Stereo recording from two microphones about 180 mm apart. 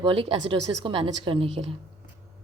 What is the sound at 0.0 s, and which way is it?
A woman's voice, 30° right (ahead or behind).